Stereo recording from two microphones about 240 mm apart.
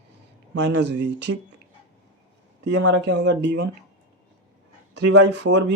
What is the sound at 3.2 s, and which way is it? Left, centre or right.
Speech, right.